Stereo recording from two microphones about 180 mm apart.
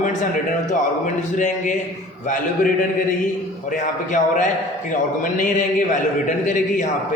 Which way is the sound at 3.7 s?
45° left (ahead or behind).